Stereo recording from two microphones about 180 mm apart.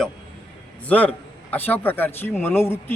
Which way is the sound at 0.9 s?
10° left (ahead or behind).